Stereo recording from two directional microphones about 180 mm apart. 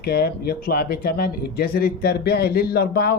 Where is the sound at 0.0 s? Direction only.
60° left (ahead or behind).